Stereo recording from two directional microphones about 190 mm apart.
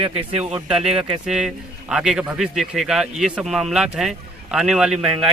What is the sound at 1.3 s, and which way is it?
A man's voice, 5° right (ahead or behind).